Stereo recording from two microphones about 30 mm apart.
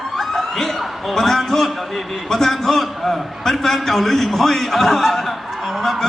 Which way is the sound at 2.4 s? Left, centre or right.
Centre.